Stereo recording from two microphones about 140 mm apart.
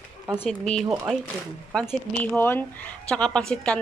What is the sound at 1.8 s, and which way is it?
A woman's voice, 15° left (ahead or behind).